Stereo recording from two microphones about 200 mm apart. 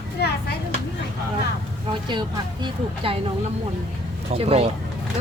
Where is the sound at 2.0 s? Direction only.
20° right (ahead or behind).